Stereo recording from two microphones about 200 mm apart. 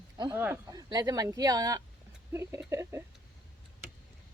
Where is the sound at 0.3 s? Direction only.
10° right (ahead or behind).